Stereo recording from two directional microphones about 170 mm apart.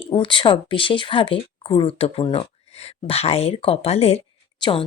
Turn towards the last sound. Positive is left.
turn(degrees=30)  # may be behind; listen again after turning